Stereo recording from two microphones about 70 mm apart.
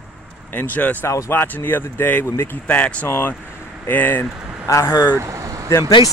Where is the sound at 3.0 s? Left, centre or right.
Left.